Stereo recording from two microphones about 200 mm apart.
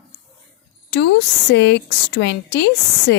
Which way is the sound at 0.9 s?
60° left (ahead or behind).